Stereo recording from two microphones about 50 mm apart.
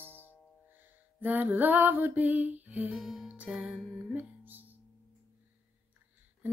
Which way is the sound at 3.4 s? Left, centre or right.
Centre.